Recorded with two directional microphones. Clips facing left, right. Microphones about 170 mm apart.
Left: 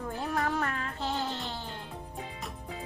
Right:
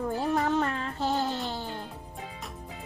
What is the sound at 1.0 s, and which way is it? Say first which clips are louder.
Music: right 5 dB; 45° right (ahead or behind).